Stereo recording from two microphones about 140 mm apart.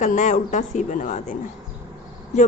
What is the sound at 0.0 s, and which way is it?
A woman's voice, 60° left (ahead or behind).